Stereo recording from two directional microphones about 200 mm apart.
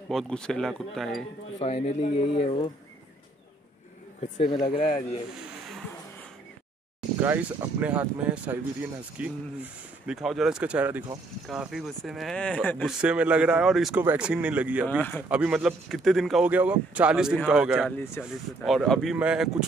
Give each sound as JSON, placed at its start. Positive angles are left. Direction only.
{"t": 0.1, "sound": "speech", "side_deg": 5}
{"t": 1.6, "sound": "speech", "side_deg": 30}
{"t": 4.2, "sound": "speech", "side_deg": 30}
{"t": 7.2, "sound": "speech", "side_deg": -10}
{"t": 12.8, "sound": "speech", "side_deg": -5}
{"t": 14.9, "sound": "speech", "side_deg": 10}
{"t": 15.2, "sound": "speech", "side_deg": -5}
{"t": 17.9, "sound": "speech", "side_deg": 15}
{"t": 18.2, "sound": "speech", "side_deg": 0}